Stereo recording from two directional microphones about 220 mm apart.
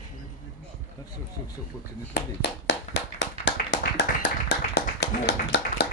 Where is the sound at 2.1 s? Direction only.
50° left (ahead or behind).